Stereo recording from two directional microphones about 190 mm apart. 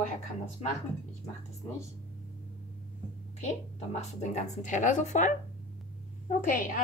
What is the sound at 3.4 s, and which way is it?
A woman's voice, 35° left (ahead or behind).